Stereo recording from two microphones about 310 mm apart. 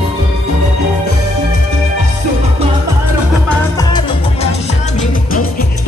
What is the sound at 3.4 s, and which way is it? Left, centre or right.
Music, centre.